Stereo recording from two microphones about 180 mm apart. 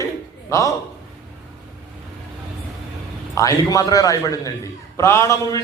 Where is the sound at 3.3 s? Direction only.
20° left (ahead or behind).